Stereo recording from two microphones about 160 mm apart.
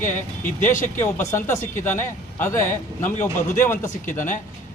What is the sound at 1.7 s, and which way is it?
A man's voice, 15° left (ahead or behind).